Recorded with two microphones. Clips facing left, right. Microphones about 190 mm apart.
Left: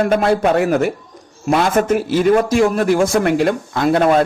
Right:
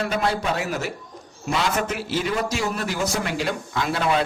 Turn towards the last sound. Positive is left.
turn(degrees=50)  # may be behind; listen again after turning